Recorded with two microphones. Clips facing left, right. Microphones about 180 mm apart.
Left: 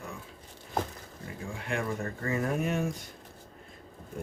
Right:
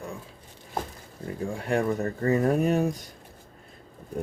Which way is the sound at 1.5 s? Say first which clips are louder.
Right 7 dB; 40° right (ahead or behind).